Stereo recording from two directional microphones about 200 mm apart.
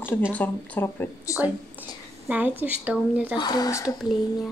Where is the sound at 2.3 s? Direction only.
10° right (ahead or behind).